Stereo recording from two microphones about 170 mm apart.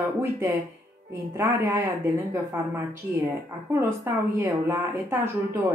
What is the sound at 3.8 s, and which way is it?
Speech, 15° right (ahead or behind).